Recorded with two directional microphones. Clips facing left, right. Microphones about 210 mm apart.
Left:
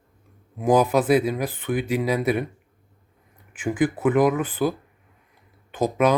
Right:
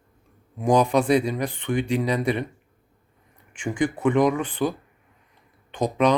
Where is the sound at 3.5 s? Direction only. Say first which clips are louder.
Left 2 dB; 5° left (ahead or behind).